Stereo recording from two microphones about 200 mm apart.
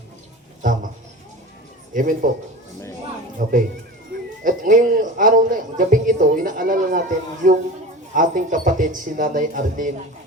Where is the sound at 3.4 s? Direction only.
40° right (ahead or behind).